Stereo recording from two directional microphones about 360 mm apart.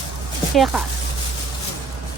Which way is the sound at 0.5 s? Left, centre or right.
Centre.